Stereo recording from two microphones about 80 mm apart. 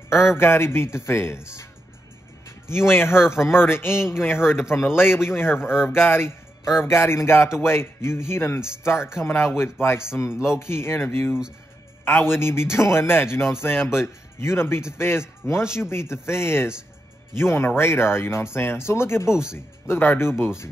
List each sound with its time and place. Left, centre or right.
0.1 s a man's voice: left
2.7 s a man's voice: left
19.3 s speech: centre
20.0 s a man's voice: left